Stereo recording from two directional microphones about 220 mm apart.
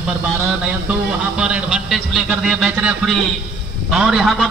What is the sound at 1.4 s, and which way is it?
A man's voice, 5° right (ahead or behind).